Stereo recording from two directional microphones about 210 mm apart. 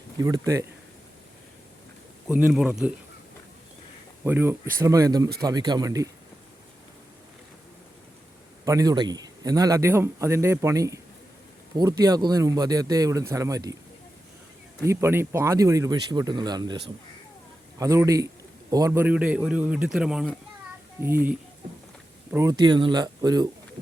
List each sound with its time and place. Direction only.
0.2 s speech: 15° right (ahead or behind)
2.2 s a man's voice: 5° right (ahead or behind)
4.2 s speech: 10° right (ahead or behind)
8.6 s speech: 15° right (ahead or behind)
14.8 s speech: 10° right (ahead or behind)
17.7 s speech: 15° right (ahead or behind)